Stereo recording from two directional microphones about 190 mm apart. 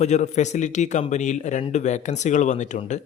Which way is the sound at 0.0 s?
35° left (ahead or behind).